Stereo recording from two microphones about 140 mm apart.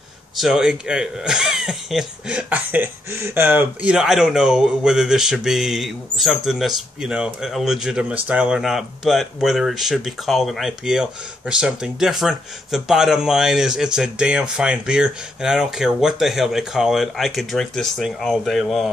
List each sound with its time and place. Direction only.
0.4 s speech: centre (ahead or behind)